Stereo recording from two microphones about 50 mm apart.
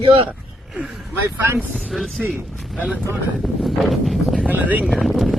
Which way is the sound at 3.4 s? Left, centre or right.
Centre.